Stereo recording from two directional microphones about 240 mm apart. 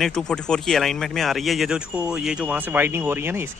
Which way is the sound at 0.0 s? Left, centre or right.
Centre.